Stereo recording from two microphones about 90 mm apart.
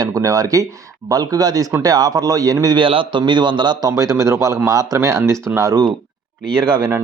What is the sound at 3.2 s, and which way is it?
Speech, 60° right (ahead or behind).